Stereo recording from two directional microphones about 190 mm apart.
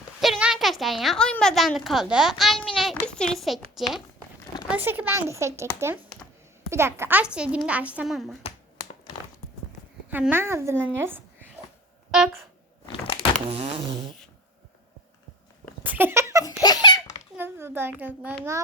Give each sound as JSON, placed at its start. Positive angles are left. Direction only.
{"t": 0.2, "sound": "a woman's voice", "side_deg": -5}
{"t": 10.1, "sound": "speech", "side_deg": -10}
{"t": 13.5, "sound": "a sound", "side_deg": -30}
{"t": 15.8, "sound": "a sound", "side_deg": -10}
{"t": 16.4, "sound": "baby laughter", "side_deg": 20}
{"t": 17.3, "sound": "a child's voice", "side_deg": -10}